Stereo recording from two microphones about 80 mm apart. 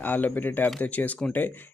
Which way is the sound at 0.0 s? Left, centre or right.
Left.